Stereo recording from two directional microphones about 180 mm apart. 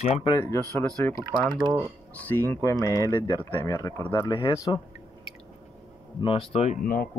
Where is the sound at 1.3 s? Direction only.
25° right (ahead or behind).